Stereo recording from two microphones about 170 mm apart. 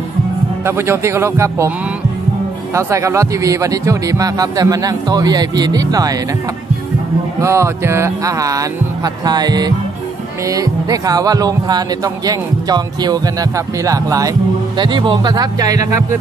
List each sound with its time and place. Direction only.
0.7 s a man's voice: 15° right (ahead or behind)
2.7 s speech: 15° right (ahead or behind)
7.4 s speech: 15° right (ahead or behind)